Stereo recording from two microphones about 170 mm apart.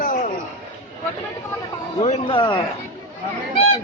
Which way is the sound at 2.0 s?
30° left (ahead or behind).